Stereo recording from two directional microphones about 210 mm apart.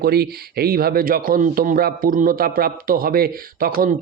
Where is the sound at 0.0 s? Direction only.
50° right (ahead or behind).